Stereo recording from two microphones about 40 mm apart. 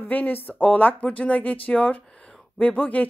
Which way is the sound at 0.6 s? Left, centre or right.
Left.